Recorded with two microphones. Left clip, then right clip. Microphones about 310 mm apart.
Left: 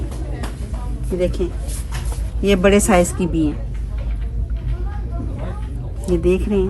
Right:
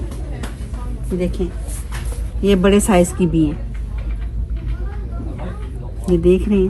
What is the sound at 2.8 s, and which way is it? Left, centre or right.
Speech, centre.